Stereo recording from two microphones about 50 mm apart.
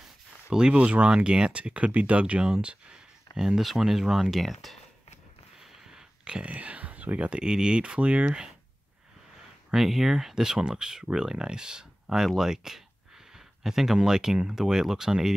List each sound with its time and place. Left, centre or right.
0.5 s speech: centre
3.3 s speech: centre
5.6 s speech: centre
9.8 s speech: centre